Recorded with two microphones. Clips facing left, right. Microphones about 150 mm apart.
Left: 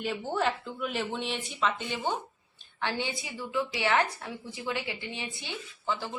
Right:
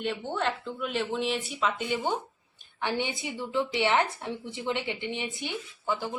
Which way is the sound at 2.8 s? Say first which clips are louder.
Right 2 dB; 20° right (ahead or behind).